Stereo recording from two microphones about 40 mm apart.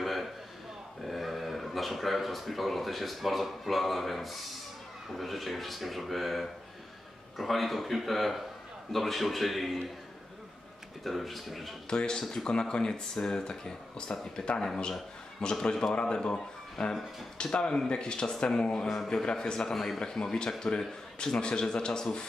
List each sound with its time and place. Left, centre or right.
0.0 s a sound: centre
1.0 s speech: centre
11.1 s speech: centre
11.9 s a man's voice: centre
19.7 s a man's voice: centre